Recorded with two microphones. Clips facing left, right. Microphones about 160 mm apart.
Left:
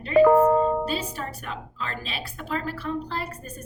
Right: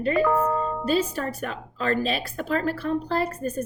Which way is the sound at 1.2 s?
50° right (ahead or behind).